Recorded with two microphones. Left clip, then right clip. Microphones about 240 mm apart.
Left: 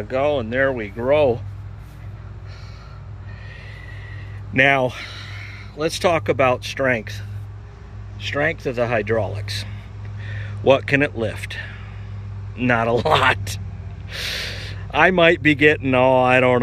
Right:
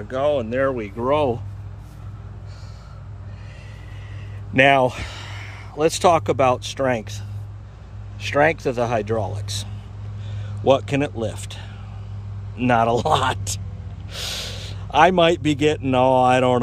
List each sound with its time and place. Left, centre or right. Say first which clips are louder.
0.1 s speech: even; centre
4.6 s speech: right 1 dB; centre
8.2 s speech: right 4 dB; centre
14.9 s speech: even; centre